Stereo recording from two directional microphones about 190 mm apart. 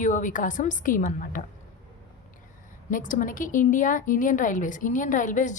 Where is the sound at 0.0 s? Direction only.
45° left (ahead or behind).